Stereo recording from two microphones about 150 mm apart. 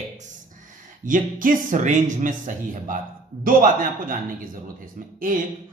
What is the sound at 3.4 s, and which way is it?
A man's voice, 70° right (ahead or behind).